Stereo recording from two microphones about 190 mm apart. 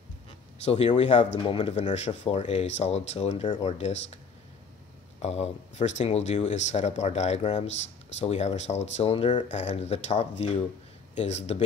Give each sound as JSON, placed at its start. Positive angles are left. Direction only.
{"t": 0.7, "sound": "speech", "side_deg": 30}
{"t": 5.2, "sound": "speech", "side_deg": 35}